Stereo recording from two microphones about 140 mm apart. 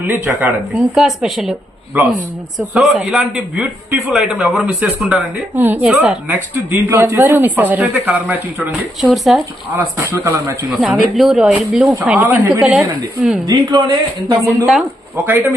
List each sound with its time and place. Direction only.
0.1 s a woman's voice: 10° right (ahead or behind)
2.6 s a man's voice: centre (ahead or behind)
9.0 s a man's voice: centre (ahead or behind)
9.7 s speech: 20° right (ahead or behind)
10.8 s a man's voice: centre (ahead or behind)
11.9 s a woman's voice: 10° right (ahead or behind)
13.5 s speech: 25° right (ahead or behind)
15.1 s a woman's voice: 15° right (ahead or behind)